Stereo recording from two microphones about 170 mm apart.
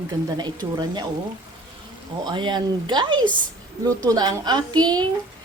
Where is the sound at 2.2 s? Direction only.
25° right (ahead or behind).